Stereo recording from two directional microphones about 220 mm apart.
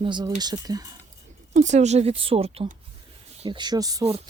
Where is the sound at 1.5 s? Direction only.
30° right (ahead or behind).